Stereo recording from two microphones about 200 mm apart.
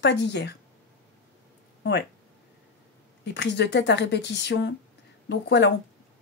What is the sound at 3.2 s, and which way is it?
A woman's voice, 60° left (ahead or behind).